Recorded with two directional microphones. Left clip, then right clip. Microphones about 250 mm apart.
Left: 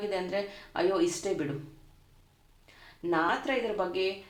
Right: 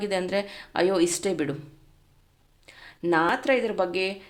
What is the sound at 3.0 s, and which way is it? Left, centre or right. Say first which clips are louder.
A woman's voice: right 6 dB; right.